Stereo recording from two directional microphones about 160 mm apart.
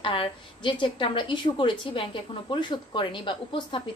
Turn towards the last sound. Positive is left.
turn(degrees=30)  # may be behind; listen again after turning